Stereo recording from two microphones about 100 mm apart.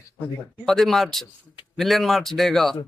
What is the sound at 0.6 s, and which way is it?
A man's voice, 5° left (ahead or behind).